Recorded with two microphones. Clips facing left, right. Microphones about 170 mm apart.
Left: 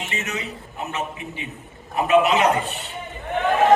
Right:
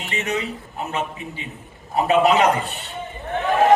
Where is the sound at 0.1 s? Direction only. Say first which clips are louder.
Right 9 dB; 35° right (ahead or behind).